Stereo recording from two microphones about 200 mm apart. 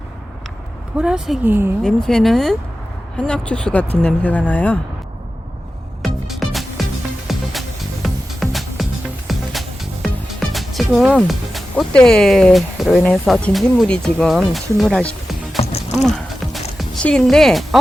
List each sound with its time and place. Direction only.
0.9 s speech: 5° right (ahead or behind)
1.8 s speech: 5° left (ahead or behind)
6.0 s music: centre (ahead or behind)
13.2 s speech: centre (ahead or behind)
15.5 s music: 30° left (ahead or behind)
16.0 s music: centre (ahead or behind)